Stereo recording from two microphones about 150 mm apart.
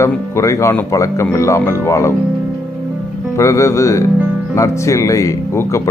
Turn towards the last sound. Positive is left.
turn(degrees=20)  # may be behind; listen again after turning